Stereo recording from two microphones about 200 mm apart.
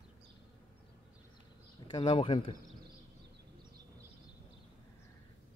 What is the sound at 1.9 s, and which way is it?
Speech, 30° left (ahead or behind).